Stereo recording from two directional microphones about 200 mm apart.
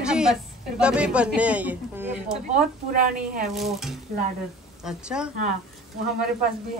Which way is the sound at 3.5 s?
Centre (ahead or behind).